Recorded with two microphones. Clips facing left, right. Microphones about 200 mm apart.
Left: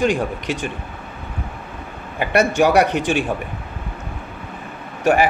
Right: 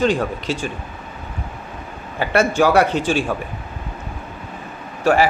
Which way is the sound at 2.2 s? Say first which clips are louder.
Even; 15° left (ahead or behind).